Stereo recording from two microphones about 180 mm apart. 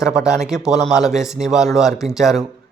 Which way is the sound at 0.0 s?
5° right (ahead or behind).